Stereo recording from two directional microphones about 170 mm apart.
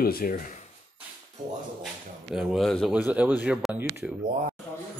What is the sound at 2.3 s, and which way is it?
Speech, centre (ahead or behind).